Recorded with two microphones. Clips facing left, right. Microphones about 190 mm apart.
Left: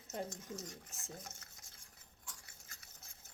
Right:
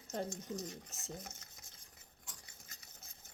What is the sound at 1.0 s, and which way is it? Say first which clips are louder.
Stir: right 3 dB; 20° right (ahead or behind).